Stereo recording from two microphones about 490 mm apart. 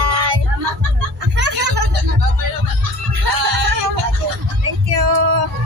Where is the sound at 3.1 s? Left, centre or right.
Right.